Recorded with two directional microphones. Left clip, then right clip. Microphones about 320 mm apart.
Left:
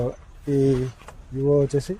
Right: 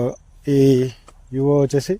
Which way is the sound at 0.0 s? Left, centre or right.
Right.